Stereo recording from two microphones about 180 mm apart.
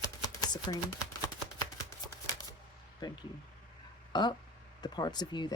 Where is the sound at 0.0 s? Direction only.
20° left (ahead or behind).